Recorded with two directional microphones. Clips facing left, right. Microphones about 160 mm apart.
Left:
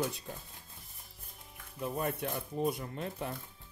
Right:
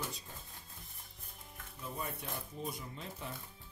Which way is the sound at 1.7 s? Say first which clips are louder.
Left 8 dB; 65° left (ahead or behind).